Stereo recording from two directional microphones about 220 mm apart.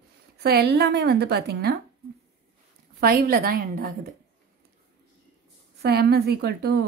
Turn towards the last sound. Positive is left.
turn(degrees=-50)  # may be behind; listen again after turning